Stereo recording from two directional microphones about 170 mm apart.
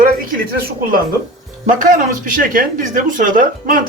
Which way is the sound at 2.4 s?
50° right (ahead or behind).